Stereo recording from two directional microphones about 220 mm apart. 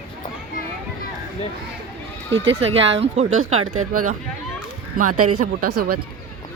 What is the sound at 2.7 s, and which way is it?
Speech, 55° right (ahead or behind).